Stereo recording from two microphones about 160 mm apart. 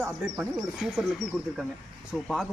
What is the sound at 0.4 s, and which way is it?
Speech, 5° right (ahead or behind).